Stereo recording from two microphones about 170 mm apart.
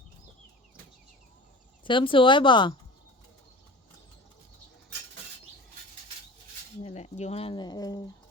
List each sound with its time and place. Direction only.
1.8 s speech: 30° left (ahead or behind)
6.8 s speech: 40° left (ahead or behind); by 8.1 s 20° left (ahead or behind)